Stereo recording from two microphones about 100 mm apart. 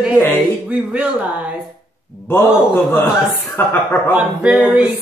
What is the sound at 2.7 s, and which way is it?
A man's voice, 25° left (ahead or behind).